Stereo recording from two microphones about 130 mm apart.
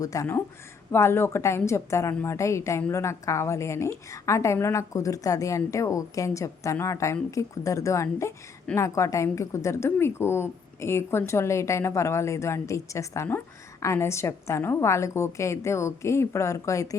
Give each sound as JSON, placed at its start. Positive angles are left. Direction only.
{"t": 0.0, "sound": "a woman's voice", "side_deg": 25}